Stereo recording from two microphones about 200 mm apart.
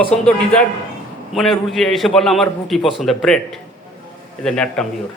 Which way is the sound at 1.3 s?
Centre (ahead or behind).